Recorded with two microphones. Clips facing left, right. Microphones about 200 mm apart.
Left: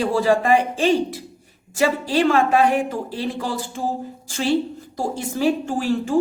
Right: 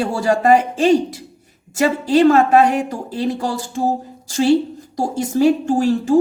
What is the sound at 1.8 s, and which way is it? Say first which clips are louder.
Speech: right 5 dB; 45° right (ahead or behind).